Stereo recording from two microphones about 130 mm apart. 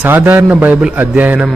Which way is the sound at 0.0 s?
15° right (ahead or behind).